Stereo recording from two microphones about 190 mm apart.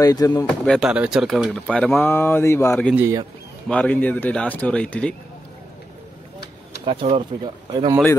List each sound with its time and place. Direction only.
0.0 s speech: 20° left (ahead or behind)
0.7 s speech: 5° right (ahead or behind)
3.0 s speech: 15° right (ahead or behind)
3.6 s speech: 5° left (ahead or behind)
6.9 s speech: 30° right (ahead or behind)